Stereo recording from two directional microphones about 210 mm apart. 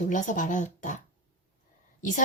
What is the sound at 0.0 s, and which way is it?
Speech, 35° left (ahead or behind).